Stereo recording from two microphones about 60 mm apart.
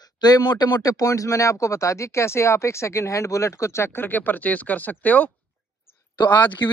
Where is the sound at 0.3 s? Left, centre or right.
Left.